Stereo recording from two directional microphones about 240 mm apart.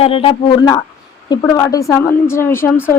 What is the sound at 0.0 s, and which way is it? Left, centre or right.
A woman's voice, left.